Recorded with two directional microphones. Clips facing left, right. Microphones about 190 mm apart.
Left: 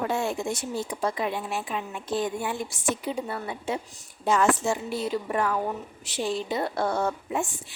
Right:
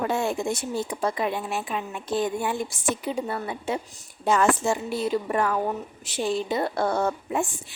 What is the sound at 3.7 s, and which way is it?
A woman's voice, 50° right (ahead or behind).